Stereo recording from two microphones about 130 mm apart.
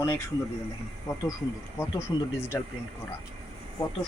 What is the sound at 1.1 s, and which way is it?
Speech, 30° left (ahead or behind).